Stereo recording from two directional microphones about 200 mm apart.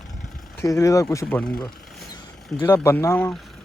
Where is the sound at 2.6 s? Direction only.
15° left (ahead or behind).